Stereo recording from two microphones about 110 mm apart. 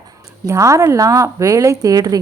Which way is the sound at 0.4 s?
25° right (ahead or behind).